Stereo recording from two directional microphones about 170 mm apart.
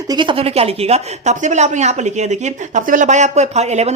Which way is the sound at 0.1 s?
30° right (ahead or behind).